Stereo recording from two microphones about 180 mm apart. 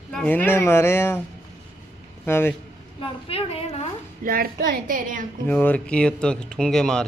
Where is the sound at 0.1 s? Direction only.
5° left (ahead or behind).